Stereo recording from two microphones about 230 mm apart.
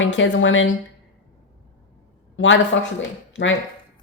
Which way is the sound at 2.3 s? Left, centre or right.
Left.